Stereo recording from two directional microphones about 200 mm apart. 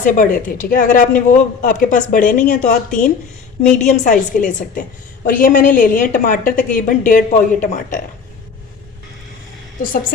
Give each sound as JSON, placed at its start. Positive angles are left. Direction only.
{"t": 0.0, "sound": "a woman's voice", "side_deg": 40}